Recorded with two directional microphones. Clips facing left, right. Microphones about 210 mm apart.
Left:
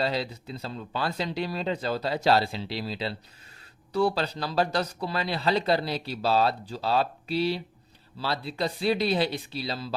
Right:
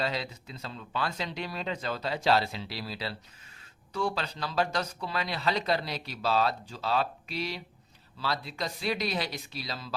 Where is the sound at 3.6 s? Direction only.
35° left (ahead or behind).